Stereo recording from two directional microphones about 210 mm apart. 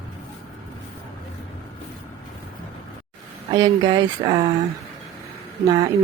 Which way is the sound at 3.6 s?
20° right (ahead or behind).